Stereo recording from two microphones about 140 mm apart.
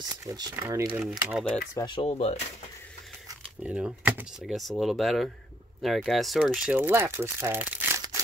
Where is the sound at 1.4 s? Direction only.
5° left (ahead or behind).